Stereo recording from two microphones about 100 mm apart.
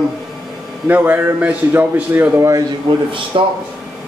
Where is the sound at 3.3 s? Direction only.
55° right (ahead or behind).